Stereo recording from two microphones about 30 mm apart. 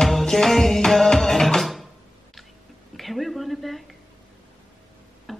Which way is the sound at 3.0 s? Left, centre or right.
Centre.